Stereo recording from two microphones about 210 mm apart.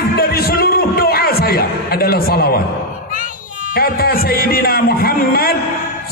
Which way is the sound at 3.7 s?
45° left (ahead or behind).